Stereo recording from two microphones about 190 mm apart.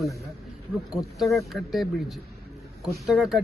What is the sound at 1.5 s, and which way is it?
Speech, centre (ahead or behind).